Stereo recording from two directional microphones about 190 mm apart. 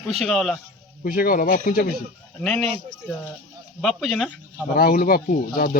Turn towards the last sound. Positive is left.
turn(degrees=50)  # may be behind; listen again after turning